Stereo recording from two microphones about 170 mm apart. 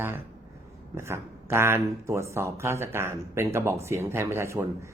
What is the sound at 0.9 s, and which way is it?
Speech, 15° right (ahead or behind).